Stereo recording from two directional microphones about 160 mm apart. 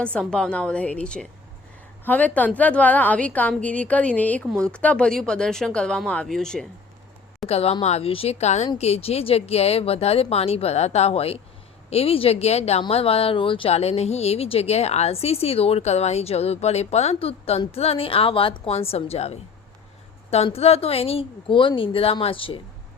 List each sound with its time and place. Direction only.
0.0 s a woman's voice: 5° left (ahead or behind)
7.4 s speech: 40° left (ahead or behind)